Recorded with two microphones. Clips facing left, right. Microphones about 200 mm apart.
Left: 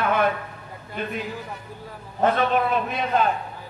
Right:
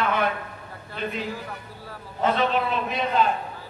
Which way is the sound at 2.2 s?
50° left (ahead or behind).